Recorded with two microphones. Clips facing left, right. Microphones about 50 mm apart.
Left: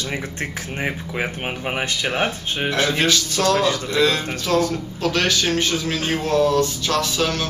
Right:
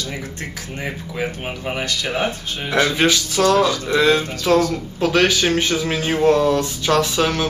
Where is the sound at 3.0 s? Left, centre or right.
Right.